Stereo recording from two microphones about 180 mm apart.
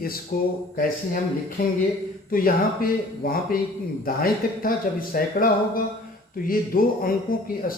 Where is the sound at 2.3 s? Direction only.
50° left (ahead or behind).